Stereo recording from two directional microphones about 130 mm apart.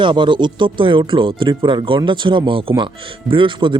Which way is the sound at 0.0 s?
40° right (ahead or behind).